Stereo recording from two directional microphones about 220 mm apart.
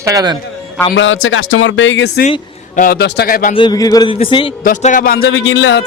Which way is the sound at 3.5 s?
20° left (ahead or behind).